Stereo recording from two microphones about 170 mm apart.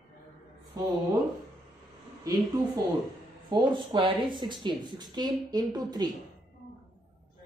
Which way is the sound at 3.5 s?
30° right (ahead or behind).